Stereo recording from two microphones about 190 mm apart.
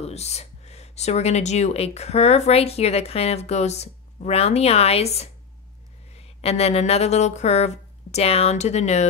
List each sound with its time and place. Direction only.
0.0 s speech: 35° left (ahead or behind)